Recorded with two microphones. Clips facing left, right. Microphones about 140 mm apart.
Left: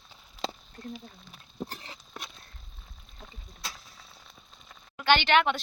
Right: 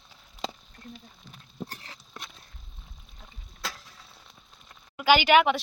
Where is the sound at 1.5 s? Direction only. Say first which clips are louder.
Left 1 dB; 20° left (ahead or behind).